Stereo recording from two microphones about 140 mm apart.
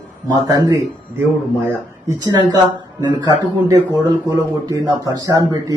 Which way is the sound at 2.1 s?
30° right (ahead or behind).